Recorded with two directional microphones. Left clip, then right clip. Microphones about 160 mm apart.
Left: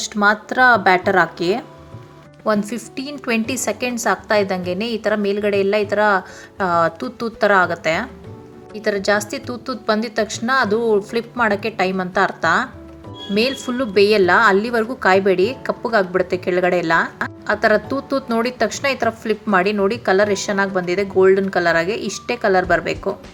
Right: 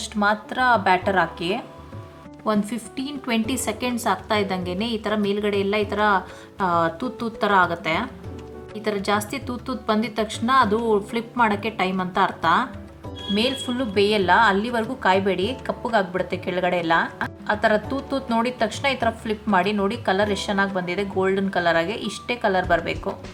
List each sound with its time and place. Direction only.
0.0 s a woman's voice: 30° left (ahead or behind)